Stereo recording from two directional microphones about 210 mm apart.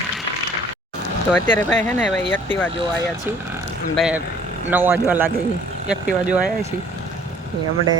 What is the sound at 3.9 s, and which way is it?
Speech, centre (ahead or behind).